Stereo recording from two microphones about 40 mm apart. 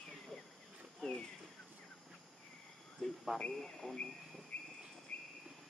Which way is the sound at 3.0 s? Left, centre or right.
Centre.